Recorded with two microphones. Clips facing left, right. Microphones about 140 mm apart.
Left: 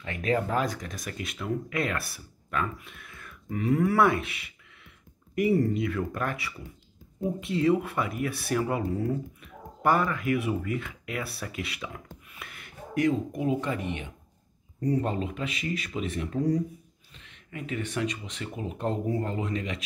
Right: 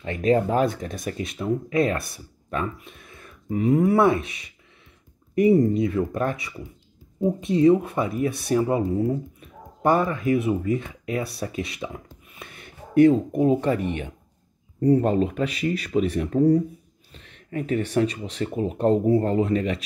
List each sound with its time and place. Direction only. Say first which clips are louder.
0.0 s speech: right 7 dB; 30° right (ahead or behind)